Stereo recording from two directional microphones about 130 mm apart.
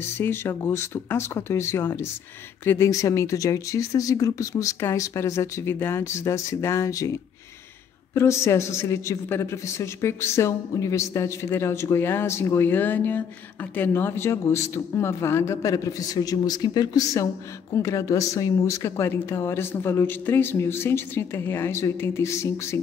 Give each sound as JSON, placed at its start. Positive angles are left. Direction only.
{"t": 0.2, "sound": "a woman's voice", "side_deg": 20}